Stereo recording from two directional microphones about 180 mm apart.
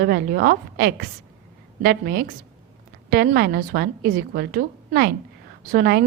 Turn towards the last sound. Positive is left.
turn(degrees=-55)  # may be behind; listen again after turning